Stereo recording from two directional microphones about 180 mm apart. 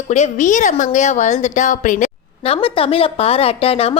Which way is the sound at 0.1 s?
40° left (ahead or behind).